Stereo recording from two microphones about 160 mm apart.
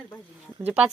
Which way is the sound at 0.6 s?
5° right (ahead or behind).